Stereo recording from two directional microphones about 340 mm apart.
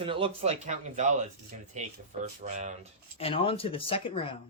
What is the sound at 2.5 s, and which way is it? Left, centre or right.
Speech, right.